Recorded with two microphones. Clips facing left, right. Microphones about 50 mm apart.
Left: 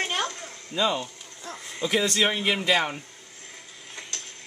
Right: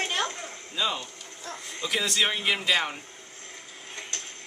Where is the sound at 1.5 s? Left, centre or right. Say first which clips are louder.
Left 4 dB; centre.